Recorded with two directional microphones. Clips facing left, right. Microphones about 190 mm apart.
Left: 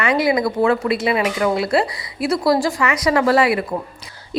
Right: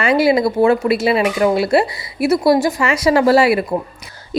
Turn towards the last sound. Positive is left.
turn(degrees=-25)  # may be behind; listen again after turning